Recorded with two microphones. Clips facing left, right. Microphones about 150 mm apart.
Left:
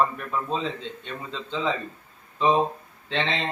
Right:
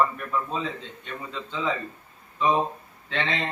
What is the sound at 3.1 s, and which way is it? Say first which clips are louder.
Speech: left 2 dB; 25° left (ahead or behind).